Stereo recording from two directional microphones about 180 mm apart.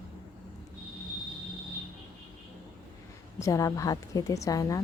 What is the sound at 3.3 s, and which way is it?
A woman's voice, 20° left (ahead or behind).